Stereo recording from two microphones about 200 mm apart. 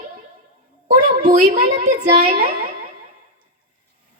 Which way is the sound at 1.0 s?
40° right (ahead or behind).